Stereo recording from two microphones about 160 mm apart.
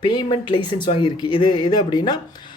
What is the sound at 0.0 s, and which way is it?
Speech, 30° left (ahead or behind).